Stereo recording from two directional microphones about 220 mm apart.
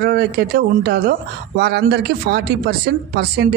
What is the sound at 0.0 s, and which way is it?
Speech, 50° right (ahead or behind).